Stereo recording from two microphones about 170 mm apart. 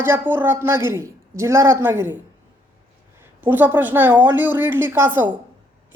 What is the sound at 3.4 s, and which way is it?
A woman's voice, 10° right (ahead or behind).